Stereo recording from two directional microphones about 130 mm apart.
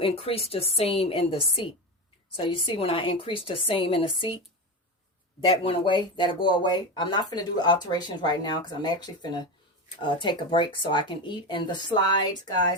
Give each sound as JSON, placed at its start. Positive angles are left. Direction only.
{"t": 0.0, "sound": "a woman's voice", "side_deg": 50}
{"t": 5.5, "sound": "speech", "side_deg": 40}